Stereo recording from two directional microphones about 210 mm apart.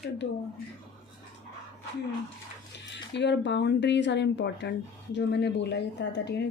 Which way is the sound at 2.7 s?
55° left (ahead or behind).